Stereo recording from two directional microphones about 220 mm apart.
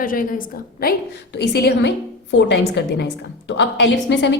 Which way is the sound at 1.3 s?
50° left (ahead or behind).